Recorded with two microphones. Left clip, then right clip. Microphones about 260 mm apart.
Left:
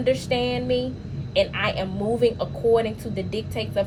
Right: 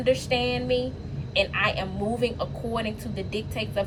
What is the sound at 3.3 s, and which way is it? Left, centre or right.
Speech, left.